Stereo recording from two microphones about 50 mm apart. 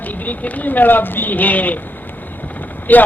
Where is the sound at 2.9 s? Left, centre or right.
Left.